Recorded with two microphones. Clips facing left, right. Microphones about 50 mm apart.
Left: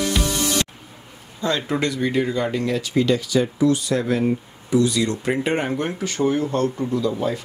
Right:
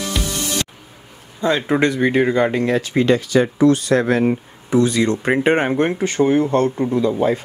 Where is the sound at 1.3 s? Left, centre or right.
Right.